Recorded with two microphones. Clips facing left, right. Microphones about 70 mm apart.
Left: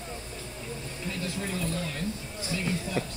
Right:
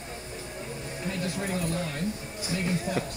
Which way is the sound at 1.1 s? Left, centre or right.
Right.